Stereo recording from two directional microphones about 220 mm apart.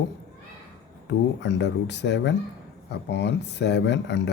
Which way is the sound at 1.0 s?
55° left (ahead or behind).